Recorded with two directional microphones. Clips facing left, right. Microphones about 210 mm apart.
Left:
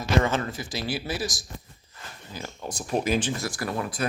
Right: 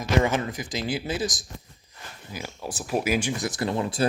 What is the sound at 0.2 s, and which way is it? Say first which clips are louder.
A man's voice: right 1 dB; 15° right (ahead or behind).